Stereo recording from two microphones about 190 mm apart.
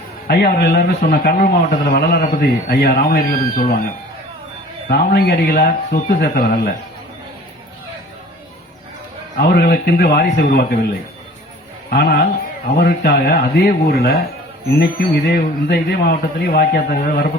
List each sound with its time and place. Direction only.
0.3 s a man's voice: 55° left (ahead or behind)
4.9 s a man's voice: 55° left (ahead or behind)
9.4 s a man's voice: 55° left (ahead or behind)
11.9 s a man's voice: 55° left (ahead or behind)